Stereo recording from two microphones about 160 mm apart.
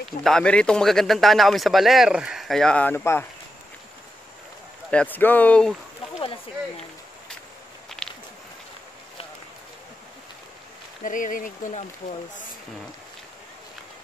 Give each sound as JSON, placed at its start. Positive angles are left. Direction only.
{"t": 0.2, "sound": "a man's voice", "side_deg": 5}
{"t": 4.9, "sound": "speech", "side_deg": 10}
{"t": 8.0, "sound": "a sound", "side_deg": 5}
{"t": 11.1, "sound": "speech", "side_deg": 55}